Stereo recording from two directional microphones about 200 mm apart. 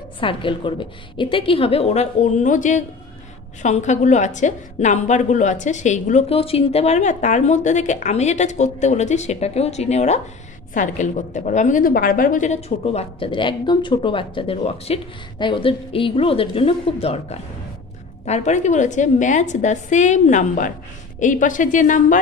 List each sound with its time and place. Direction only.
0.2 s a woman's voice: 25° left (ahead or behind)